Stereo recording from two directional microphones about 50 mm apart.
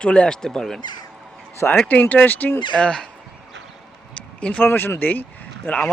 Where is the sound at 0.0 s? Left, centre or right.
Centre.